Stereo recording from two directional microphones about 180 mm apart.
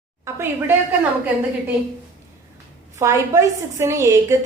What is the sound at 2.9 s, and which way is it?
A woman's voice, 15° right (ahead or behind).